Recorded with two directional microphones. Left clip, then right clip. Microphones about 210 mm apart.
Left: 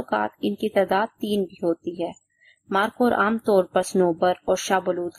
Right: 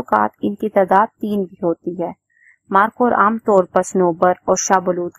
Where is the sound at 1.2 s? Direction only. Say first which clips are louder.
Right 4 dB; 20° right (ahead or behind).